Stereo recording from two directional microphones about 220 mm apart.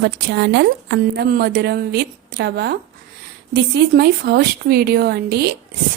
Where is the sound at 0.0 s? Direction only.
50° right (ahead or behind).